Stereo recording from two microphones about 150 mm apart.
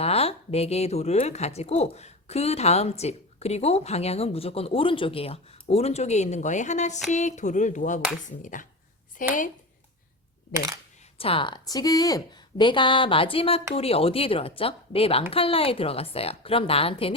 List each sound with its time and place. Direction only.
0.0 s speech: 40° left (ahead or behind); by 9.3 s 60° left (ahead or behind)
11.2 s a woman's voice: 35° left (ahead or behind)